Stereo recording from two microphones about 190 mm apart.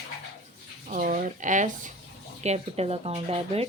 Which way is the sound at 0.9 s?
45° right (ahead or behind).